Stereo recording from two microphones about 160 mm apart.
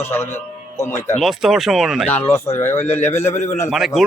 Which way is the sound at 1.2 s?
Centre (ahead or behind).